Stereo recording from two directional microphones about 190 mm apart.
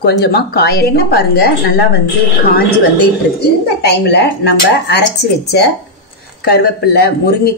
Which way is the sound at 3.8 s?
60° left (ahead or behind).